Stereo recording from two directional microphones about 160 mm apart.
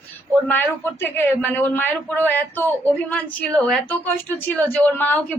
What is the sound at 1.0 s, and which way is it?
A woman's voice, 15° left (ahead or behind).